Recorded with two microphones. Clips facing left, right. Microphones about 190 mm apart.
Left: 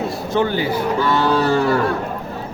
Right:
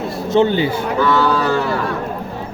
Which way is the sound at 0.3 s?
20° right (ahead or behind).